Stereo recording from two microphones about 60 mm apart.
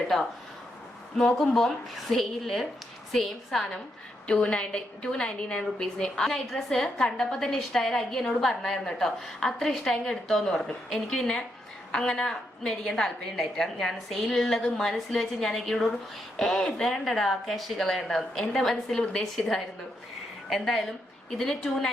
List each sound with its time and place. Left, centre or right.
1.1 s a woman's voice: centre
4.3 s a woman's voice: centre